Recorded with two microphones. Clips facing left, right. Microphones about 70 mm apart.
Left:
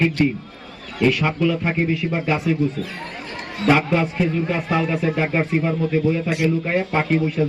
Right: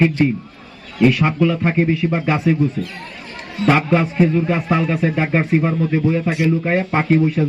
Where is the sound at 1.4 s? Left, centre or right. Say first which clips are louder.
Right 3 dB; right.